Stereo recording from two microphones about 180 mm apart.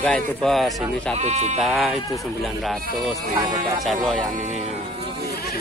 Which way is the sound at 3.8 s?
Centre (ahead or behind).